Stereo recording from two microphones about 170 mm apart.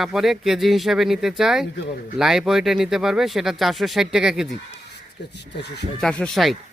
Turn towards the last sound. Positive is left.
turn(degrees=0)  # may be behind; listen again after turning